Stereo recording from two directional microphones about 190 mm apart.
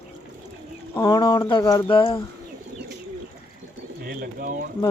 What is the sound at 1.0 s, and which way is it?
Speech, 25° left (ahead or behind).